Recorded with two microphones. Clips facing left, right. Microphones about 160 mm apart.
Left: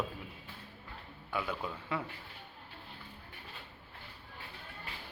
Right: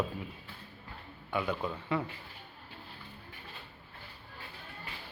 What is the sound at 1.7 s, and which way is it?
Speech, 10° right (ahead or behind).